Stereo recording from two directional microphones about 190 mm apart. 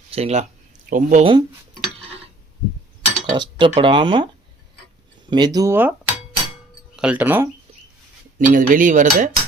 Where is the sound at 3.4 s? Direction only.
25° right (ahead or behind).